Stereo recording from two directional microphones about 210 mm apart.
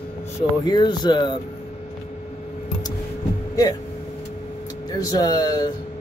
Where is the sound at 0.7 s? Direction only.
20° left (ahead or behind).